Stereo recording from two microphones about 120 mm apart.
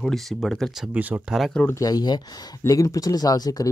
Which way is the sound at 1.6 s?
30° left (ahead or behind).